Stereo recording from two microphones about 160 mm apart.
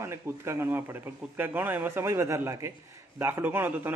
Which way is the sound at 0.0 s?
15° right (ahead or behind).